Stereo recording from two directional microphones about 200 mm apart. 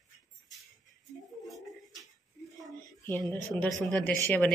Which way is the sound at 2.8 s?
10° left (ahead or behind).